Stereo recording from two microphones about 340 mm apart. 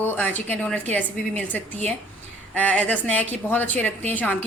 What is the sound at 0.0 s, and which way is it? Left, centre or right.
A woman's voice, centre.